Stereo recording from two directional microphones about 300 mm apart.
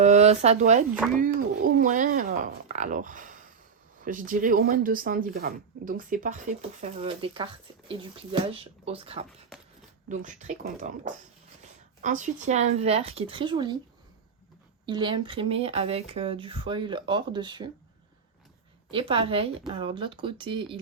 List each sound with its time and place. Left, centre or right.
0.0 s speech: right
14.8 s speech: centre
18.9 s speech: centre